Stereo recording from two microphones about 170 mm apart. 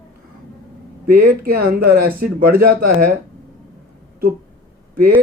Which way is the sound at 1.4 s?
65° right (ahead or behind).